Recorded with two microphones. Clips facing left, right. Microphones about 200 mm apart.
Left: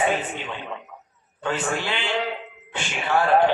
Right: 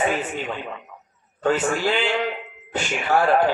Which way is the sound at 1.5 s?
40° right (ahead or behind).